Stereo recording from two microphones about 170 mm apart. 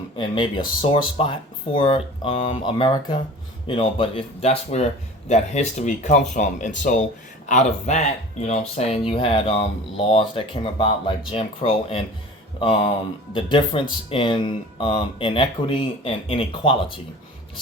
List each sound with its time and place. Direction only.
0.2 s speech: 30° left (ahead or behind)
13.3 s speech: 30° left (ahead or behind)